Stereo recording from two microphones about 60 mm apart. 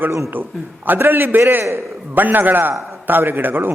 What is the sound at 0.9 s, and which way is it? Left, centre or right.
A man's voice, right.